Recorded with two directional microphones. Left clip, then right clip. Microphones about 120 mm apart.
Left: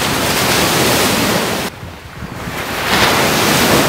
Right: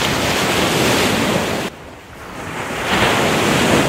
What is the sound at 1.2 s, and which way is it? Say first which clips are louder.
Ocean: left 3 dB; 35° left (ahead or behind).